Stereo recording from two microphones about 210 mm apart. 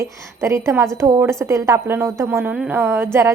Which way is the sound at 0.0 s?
15° right (ahead or behind).